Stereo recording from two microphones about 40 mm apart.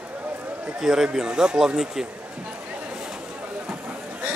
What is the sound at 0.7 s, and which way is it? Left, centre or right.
Speech, centre.